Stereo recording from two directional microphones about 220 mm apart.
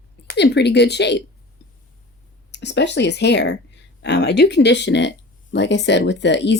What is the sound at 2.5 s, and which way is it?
Speech, 50° left (ahead or behind).